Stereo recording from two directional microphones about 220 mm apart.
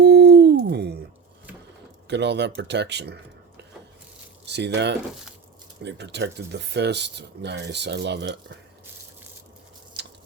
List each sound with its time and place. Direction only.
0.0 s hoot: 50° right (ahead or behind)
2.0 s speech: 50° right (ahead or behind)
4.4 s speech: 50° right (ahead or behind)